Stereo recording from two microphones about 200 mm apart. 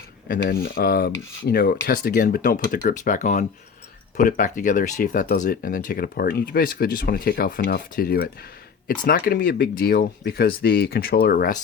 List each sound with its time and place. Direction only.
0.3 s speech: 50° left (ahead or behind)